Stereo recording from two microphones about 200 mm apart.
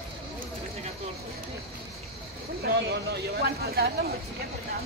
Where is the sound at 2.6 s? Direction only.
55° right (ahead or behind).